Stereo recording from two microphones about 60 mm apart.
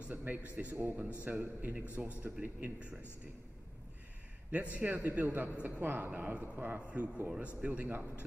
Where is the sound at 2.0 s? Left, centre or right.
Right.